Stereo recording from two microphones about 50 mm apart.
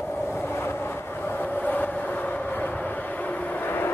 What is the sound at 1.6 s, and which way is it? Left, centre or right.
Train, left.